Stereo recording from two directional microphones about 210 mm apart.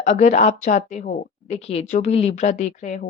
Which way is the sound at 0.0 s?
35° left (ahead or behind).